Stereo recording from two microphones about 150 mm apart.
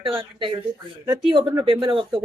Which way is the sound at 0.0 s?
35° right (ahead or behind).